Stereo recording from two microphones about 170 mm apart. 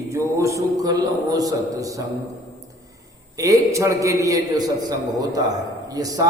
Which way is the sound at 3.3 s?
20° right (ahead or behind).